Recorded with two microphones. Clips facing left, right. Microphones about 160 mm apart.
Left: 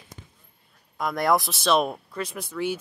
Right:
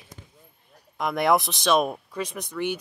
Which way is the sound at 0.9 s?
Centre (ahead or behind).